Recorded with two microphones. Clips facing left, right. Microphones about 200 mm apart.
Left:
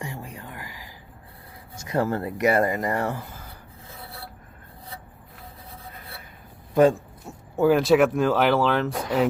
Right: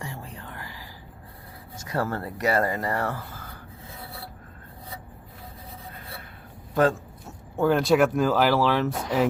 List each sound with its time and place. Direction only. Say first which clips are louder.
0.0 s whispering: left 2 dB; 15° left (ahead or behind)
1.9 s speech: left 4 dB; 20° left (ahead or behind)
7.5 s speech: left 3 dB; 5° left (ahead or behind)